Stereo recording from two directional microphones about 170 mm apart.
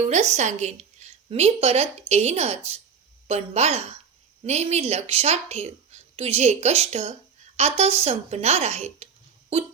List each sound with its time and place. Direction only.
0.0 s a woman's voice: 40° right (ahead or behind)